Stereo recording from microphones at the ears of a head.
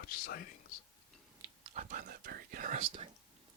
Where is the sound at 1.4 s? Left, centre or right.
Right.